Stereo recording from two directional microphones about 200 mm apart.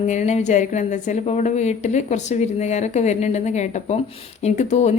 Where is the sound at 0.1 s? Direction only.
35° left (ahead or behind).